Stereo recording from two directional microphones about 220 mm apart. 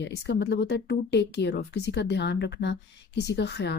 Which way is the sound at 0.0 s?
50° left (ahead or behind).